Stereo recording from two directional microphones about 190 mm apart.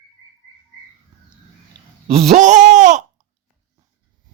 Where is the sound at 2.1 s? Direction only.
35° right (ahead or behind).